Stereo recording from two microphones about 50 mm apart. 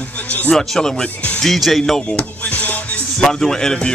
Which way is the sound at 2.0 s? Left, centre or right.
Left.